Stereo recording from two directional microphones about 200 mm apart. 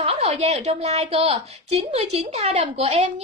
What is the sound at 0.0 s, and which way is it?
A woman's voice, 30° right (ahead or behind).